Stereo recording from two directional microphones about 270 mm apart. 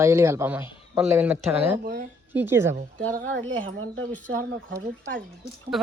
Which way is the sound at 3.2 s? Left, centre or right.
Right.